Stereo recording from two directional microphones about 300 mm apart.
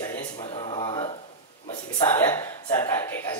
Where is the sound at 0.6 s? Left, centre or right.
Centre.